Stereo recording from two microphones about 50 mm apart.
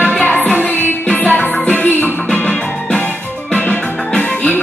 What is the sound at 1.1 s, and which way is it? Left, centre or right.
Music, left.